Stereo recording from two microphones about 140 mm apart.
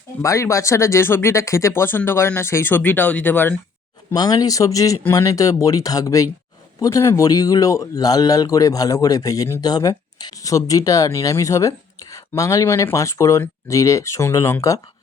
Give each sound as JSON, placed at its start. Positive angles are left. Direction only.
{"t": 0.2, "sound": "speech", "side_deg": 20}
{"t": 4.1, "sound": "speech", "side_deg": 30}